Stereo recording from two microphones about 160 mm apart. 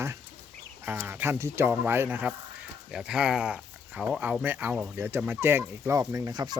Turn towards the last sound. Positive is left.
turn(degrees=-25)  # may be behind; listen again after turning